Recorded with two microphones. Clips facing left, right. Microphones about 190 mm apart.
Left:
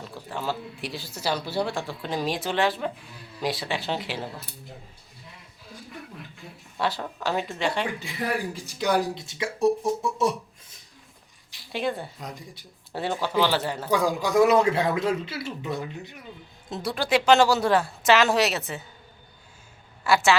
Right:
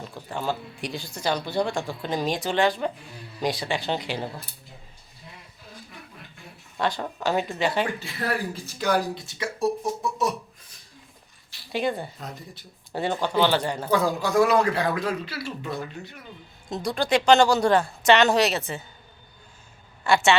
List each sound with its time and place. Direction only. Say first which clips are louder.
0.0 s speech: right 1 dB; centre (ahead or behind)
6.7 s speech: right 1 dB; 5° left (ahead or behind)
7.9 s speech: even; 15° left (ahead or behind)
11.7 s speech: right 2 dB; centre (ahead or behind)
12.2 s a man's voice: even; 15° left (ahead or behind)
12.9 s a man's voice: right 2 dB; 5° left (ahead or behind); by 16.1 s 20° left (ahead or behind)
16.6 s speech: right 2 dB; 5° left (ahead or behind)
20.1 s speech: right 1 dB; centre (ahead or behind)